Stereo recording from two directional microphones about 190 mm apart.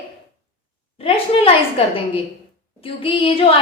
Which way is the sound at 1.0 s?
30° left (ahead or behind).